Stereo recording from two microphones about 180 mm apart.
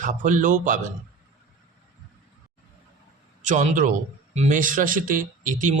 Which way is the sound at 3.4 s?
45° right (ahead or behind).